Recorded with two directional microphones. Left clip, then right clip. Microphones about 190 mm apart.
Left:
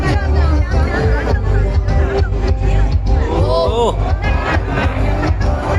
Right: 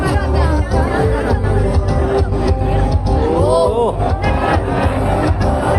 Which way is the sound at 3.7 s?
5° right (ahead or behind).